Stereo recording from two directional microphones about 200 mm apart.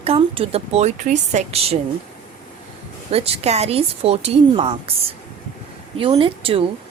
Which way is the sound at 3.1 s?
30° right (ahead or behind).